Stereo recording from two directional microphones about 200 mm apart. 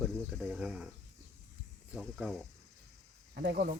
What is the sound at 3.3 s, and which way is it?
Speech, 50° right (ahead or behind).